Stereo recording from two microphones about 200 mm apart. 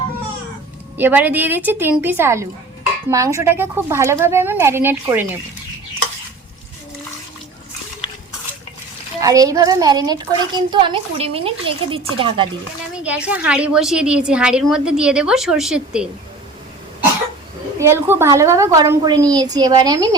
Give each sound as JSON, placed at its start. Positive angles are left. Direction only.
{"t": 0.9, "sound": "speech", "side_deg": -10}
{"t": 9.2, "sound": "a child's voice", "side_deg": -15}
{"t": 13.0, "sound": "a woman's voice", "side_deg": -5}
{"t": 17.7, "sound": "a child's voice", "side_deg": -10}